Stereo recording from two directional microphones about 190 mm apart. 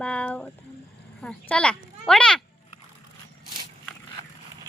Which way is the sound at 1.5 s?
5° left (ahead or behind).